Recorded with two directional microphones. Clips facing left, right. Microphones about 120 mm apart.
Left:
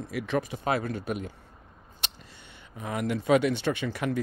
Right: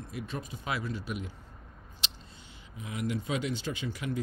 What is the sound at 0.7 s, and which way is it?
Speech, 55° left (ahead or behind).